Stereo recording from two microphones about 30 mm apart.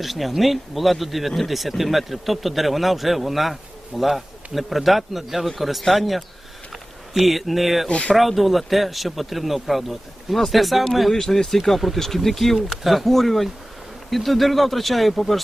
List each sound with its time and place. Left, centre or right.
0.0 s speech: centre
7.9 s speech: left
8.1 s speech: centre
11.1 s speech: centre